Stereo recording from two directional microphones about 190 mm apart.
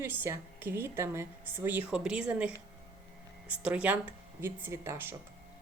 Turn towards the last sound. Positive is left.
turn(degrees=-15)  # may be behind; listen again after turning